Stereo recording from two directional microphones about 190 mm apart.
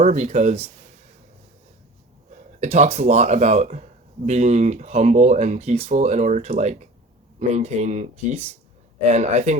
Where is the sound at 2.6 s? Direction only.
35° right (ahead or behind).